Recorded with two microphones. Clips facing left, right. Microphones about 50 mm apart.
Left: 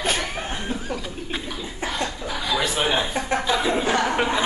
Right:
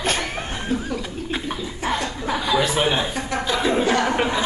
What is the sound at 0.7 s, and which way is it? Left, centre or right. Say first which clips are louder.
Speech: right 4 dB; centre.